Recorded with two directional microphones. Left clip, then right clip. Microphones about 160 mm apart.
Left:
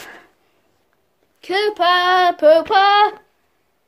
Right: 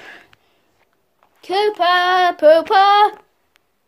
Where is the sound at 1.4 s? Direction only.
20° left (ahead or behind).